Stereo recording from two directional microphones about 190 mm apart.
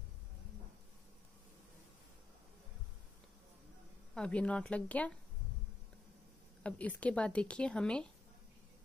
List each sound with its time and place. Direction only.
4.1 s speech: 5° left (ahead or behind)
6.6 s speech: 5° left (ahead or behind)